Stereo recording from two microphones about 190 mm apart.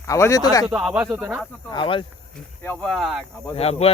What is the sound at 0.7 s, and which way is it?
Speech, 5° right (ahead or behind).